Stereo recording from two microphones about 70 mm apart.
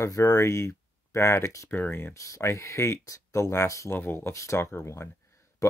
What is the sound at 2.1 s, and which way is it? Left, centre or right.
Speech, left.